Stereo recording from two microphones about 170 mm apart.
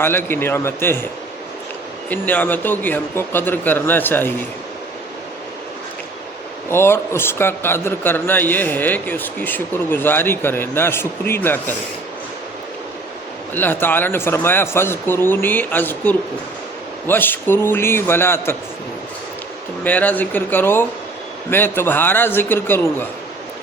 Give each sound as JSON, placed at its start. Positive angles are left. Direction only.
{"t": 0.0, "sound": "a man's voice", "side_deg": 15}
{"t": 2.0, "sound": "a man's voice", "side_deg": 10}
{"t": 6.7, "sound": "a man's voice", "side_deg": 15}
{"t": 13.5, "sound": "a man's voice", "side_deg": 10}
{"t": 19.8, "sound": "a man's voice", "side_deg": 10}